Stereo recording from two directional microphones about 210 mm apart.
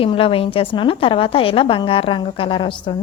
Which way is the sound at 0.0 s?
25° left (ahead or behind).